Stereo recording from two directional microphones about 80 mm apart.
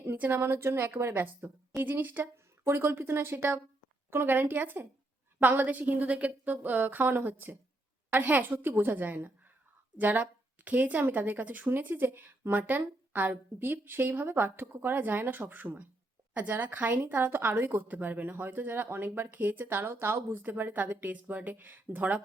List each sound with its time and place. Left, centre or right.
0.0 s a woman's voice: right